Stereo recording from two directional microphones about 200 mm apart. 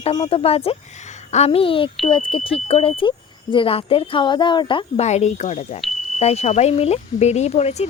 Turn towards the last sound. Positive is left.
turn(degrees=30)  # may be behind; listen again after turning